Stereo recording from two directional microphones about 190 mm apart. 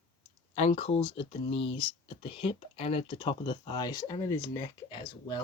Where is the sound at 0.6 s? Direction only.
35° left (ahead or behind).